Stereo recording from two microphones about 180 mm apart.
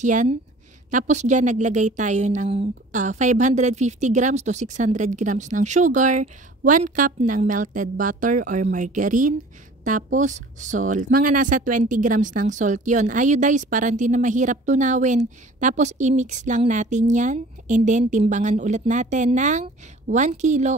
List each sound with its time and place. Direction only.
0.0 s a woman's voice: 45° right (ahead or behind)